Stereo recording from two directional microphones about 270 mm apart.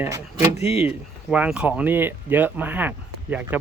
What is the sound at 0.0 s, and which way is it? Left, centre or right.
Speech, centre.